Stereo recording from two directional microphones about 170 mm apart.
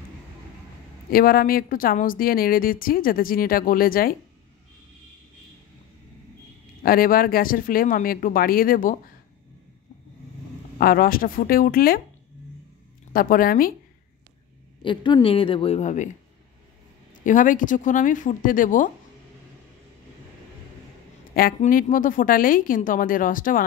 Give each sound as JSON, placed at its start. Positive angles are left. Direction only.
{"t": 1.1, "sound": "a woman's voice", "side_deg": 60}
{"t": 6.8, "sound": "a woman's voice", "side_deg": 60}
{"t": 10.8, "sound": "a woman's voice", "side_deg": 60}
{"t": 13.1, "sound": "a woman's voice", "side_deg": 55}
{"t": 14.8, "sound": "speech", "side_deg": 30}
{"t": 17.2, "sound": "a woman's voice", "side_deg": 50}
{"t": 21.5, "sound": "a woman's voice", "side_deg": 50}